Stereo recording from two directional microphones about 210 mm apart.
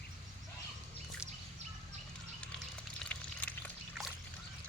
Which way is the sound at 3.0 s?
5° left (ahead or behind).